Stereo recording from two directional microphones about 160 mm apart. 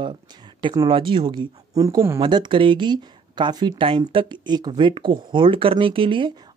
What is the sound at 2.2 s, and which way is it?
Speech, 30° right (ahead or behind).